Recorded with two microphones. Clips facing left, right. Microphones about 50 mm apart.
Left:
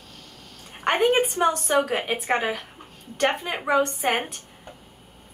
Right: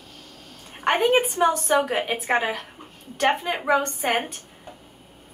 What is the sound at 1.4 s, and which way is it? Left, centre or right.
A woman's voice, centre.